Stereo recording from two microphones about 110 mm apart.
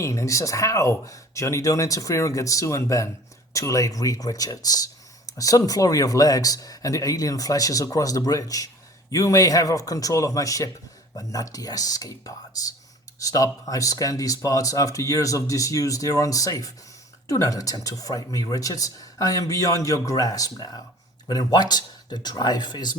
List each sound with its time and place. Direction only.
0.0 s speech: 25° left (ahead or behind)